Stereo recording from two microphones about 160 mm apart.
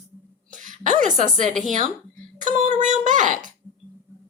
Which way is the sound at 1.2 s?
55° right (ahead or behind).